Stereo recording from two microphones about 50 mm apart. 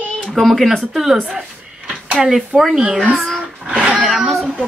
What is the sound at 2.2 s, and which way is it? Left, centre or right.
Speech, centre.